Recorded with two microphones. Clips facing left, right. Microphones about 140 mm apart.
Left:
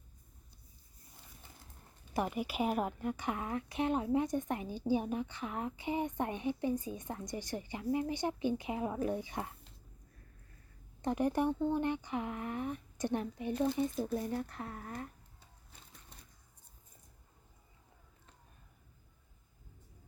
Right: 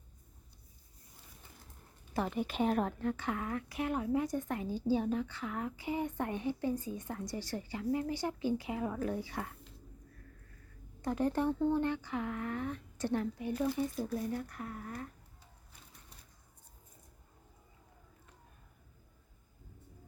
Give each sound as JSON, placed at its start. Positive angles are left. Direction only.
{"t": 2.1, "sound": "a woman's voice", "side_deg": 10}
{"t": 11.0, "sound": "a woman's voice", "side_deg": 15}